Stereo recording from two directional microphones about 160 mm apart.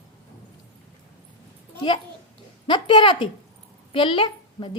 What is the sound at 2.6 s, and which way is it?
A woman's voice, 30° left (ahead or behind).